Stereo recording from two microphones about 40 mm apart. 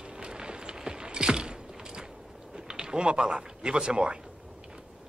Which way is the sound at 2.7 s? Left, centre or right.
Right.